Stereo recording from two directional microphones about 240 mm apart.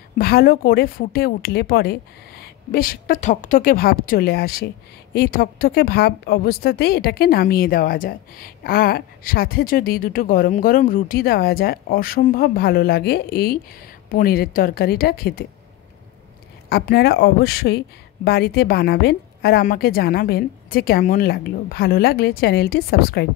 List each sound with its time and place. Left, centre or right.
0.2 s a woman's voice: left
16.6 s a woman's voice: left